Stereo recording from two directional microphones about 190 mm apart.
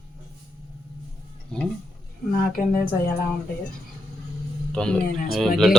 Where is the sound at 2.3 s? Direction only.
50° left (ahead or behind).